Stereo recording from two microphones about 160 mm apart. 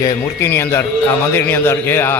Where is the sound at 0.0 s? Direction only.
20° left (ahead or behind).